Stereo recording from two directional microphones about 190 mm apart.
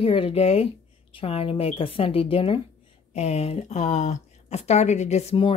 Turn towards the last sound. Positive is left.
turn(degrees=30)  # may be behind; listen again after turning